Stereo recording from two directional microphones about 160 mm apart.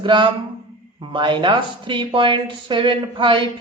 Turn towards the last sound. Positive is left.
turn(degrees=-30)  # may be behind; listen again after turning